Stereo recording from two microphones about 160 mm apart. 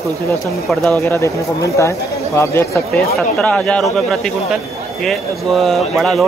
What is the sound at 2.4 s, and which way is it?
Speech, 15° left (ahead or behind).